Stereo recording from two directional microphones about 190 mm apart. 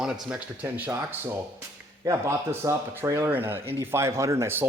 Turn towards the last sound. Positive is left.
turn(degrees=-15)  # may be behind; listen again after turning